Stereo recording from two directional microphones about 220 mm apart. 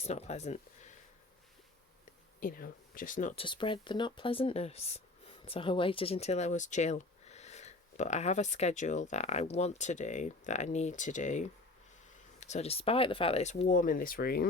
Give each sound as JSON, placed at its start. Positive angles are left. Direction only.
{"t": 0.0, "sound": "speech", "side_deg": 30}
{"t": 2.4, "sound": "speech", "side_deg": 40}
{"t": 3.4, "sound": "speech", "side_deg": 20}